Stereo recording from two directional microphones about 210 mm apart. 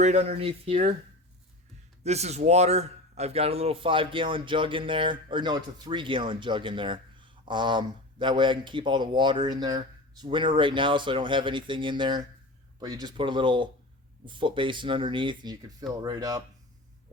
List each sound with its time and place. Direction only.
0.0 s a man's voice: 35° right (ahead or behind)
2.0 s a man's voice: 30° right (ahead or behind)